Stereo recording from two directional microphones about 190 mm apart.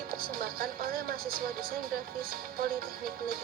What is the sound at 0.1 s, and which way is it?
Speech, 50° right (ahead or behind).